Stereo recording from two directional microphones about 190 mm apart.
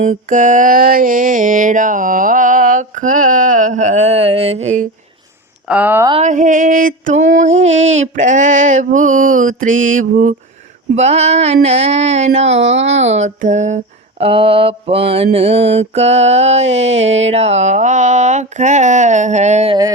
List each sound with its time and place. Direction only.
0.0 s mantra: 40° right (ahead or behind)
5.6 s speech: 10° right (ahead or behind)
6.2 s mantra: 40° right (ahead or behind)
12.5 s speech: 70° right (ahead or behind)
13.1 s mantra: 40° right (ahead or behind)